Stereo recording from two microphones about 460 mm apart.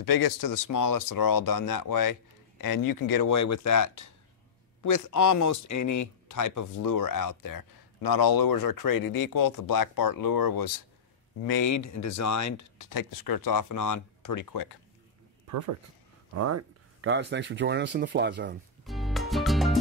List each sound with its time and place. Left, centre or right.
0.0 s speech: left
16.3 s speech: right
18.9 s music: centre